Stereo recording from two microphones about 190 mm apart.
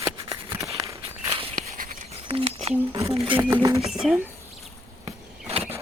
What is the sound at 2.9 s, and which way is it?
Speech, 30° right (ahead or behind).